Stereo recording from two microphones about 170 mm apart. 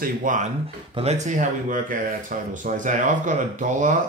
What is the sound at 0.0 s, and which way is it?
Speech, 50° right (ahead or behind).